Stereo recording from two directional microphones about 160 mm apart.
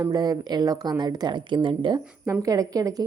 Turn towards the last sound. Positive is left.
turn(degrees=-20)  # may be behind; listen again after turning